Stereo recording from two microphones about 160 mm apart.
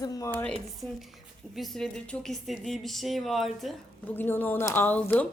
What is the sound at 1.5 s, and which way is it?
Speech, centre (ahead or behind).